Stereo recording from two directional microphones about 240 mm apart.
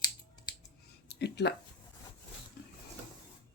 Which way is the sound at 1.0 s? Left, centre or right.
Left.